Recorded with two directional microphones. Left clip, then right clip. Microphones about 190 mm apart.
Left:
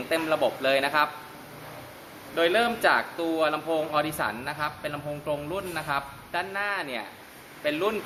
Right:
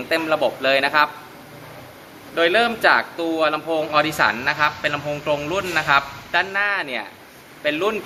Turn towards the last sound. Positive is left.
turn(degrees=5)  # may be behind; listen again after turning